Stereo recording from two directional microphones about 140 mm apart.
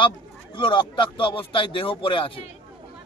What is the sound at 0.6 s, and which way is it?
A man's voice, 35° left (ahead or behind).